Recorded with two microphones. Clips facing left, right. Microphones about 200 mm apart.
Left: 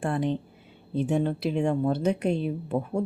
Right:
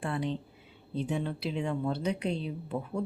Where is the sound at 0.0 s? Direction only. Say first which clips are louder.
Left 6 dB; 50° left (ahead or behind).